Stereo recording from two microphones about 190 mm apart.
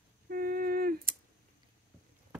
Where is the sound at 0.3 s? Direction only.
50° right (ahead or behind).